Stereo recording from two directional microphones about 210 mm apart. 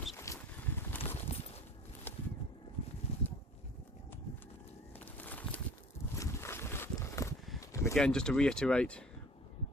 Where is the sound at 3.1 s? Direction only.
30° left (ahead or behind).